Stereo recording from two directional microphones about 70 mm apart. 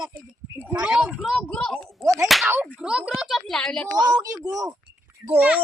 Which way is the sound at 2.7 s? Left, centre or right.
Centre.